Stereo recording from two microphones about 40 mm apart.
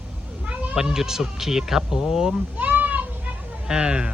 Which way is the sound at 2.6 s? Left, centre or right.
Right.